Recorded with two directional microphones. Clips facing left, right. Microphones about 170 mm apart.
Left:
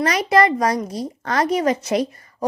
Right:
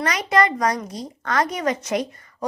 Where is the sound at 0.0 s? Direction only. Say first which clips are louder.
Left 4 dB; 30° left (ahead or behind).